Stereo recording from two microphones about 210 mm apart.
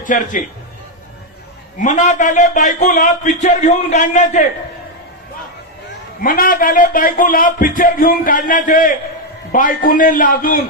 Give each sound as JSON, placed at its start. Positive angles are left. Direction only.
{"t": 0.0, "sound": "a man's voice", "side_deg": 40}
{"t": 1.8, "sound": "speech", "side_deg": 35}
{"t": 6.2, "sound": "speech", "side_deg": 40}